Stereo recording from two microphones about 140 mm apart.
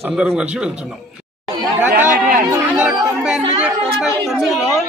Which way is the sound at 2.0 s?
70° right (ahead or behind).